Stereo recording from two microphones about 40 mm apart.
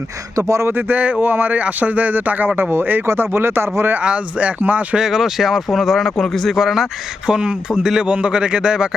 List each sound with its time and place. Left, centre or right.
0.7 s speech: right
2.6 s speech: right
4.0 s speech: right
4.9 s speech: centre
6.1 s a man's voice: centre
6.5 s speech: centre
7.3 s a man's voice: right
8.0 s a man's voice: right